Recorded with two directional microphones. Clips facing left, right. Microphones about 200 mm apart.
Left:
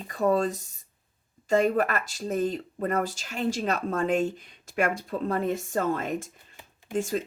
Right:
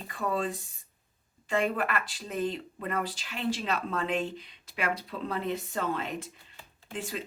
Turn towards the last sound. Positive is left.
turn(degrees=45)  # may be behind; listen again after turning